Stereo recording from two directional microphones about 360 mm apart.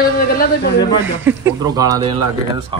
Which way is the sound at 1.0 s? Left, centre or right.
Centre.